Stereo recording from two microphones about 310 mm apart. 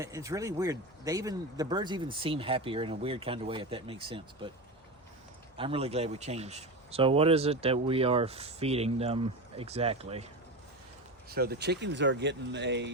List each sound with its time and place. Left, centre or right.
0.0 s speech: centre
5.5 s speech: centre
11.3 s speech: right